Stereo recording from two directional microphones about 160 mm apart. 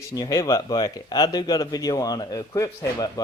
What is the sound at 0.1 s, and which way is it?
Speech, 20° left (ahead or behind).